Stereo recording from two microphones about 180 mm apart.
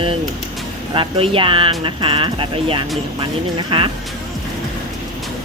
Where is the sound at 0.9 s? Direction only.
30° right (ahead or behind).